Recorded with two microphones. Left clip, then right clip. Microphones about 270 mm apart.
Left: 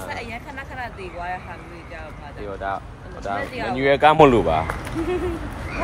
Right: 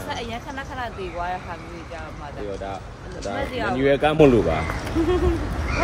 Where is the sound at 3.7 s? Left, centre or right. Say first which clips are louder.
Left 4 dB; centre.